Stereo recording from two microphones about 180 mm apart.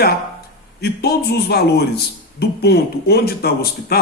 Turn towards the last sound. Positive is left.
turn(degrees=60)  # may be behind; listen again after turning